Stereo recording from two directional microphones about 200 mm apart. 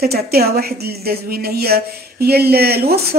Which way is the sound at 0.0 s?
50° right (ahead or behind).